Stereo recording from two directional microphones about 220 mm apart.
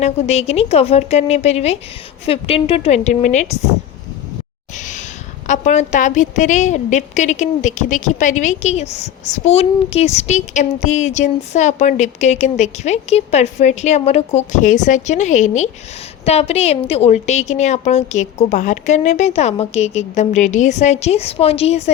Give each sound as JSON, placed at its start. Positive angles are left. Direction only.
{"t": 0.0, "sound": "a woman's voice", "side_deg": 30}
{"t": 4.8, "sound": "a sound", "side_deg": 35}
{"t": 5.5, "sound": "a woman's voice", "side_deg": 30}